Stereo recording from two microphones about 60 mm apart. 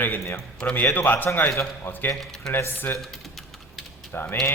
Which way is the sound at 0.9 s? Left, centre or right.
Left.